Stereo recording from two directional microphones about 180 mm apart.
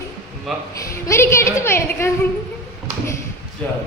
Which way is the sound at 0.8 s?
15° left (ahead or behind).